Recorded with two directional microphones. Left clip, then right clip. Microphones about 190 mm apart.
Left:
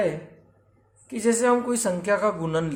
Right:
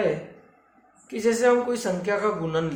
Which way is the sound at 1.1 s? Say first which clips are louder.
Right 1 dB; 30° left (ahead or behind).